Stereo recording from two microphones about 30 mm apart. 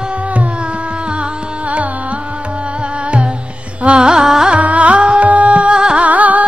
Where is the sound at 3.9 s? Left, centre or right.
Right.